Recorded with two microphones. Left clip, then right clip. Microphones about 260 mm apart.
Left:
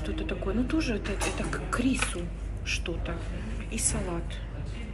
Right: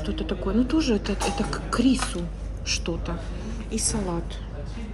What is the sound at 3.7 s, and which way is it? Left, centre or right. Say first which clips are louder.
Speech: right 5 dB; centre.